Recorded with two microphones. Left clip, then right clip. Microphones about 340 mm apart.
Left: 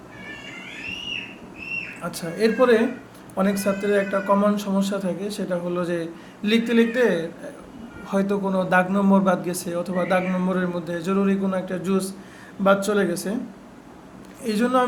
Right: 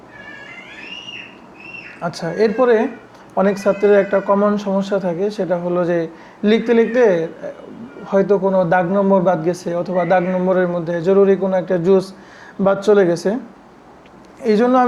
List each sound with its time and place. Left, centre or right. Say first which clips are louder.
2.0 s speech: right 8 dB; right
14.4 s speech: right 7 dB; right